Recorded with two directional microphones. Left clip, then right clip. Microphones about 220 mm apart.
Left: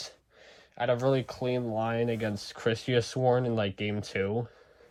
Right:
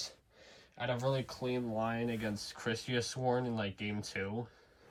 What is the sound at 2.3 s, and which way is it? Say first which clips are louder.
Speech: left 4 dB; 25° left (ahead or behind).